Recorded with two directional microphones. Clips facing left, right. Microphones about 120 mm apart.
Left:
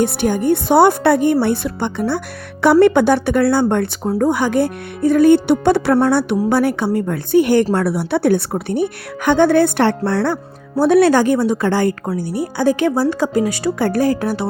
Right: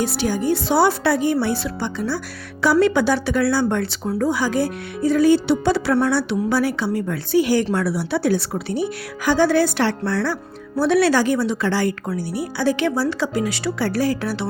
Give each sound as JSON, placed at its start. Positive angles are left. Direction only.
{"t": 0.0, "sound": "a woman's voice", "side_deg": 55}